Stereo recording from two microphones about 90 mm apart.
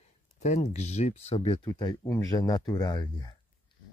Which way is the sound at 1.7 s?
50° left (ahead or behind).